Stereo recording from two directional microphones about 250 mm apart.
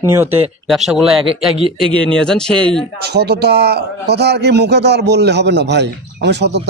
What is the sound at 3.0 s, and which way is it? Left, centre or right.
A man's voice, right.